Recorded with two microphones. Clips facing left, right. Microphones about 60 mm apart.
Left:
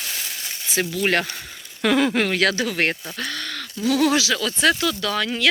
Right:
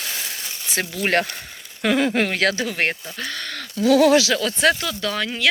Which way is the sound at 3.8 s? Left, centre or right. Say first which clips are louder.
Right 5 dB; right.